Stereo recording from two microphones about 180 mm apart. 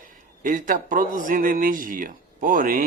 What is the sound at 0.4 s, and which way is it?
Speech, 45° right (ahead or behind).